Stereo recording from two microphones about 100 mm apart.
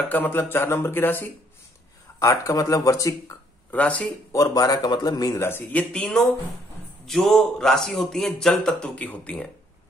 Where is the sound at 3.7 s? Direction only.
15° left (ahead or behind).